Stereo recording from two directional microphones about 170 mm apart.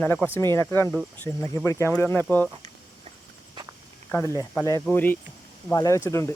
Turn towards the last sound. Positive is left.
turn(degrees=15)  # may be behind; listen again after turning